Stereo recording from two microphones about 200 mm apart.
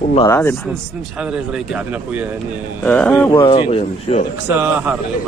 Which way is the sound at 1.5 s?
5° right (ahead or behind).